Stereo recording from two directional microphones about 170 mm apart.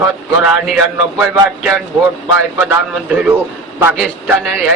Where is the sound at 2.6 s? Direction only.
10° right (ahead or behind).